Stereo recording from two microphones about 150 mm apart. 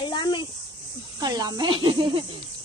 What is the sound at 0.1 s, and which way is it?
Speech, 30° left (ahead or behind).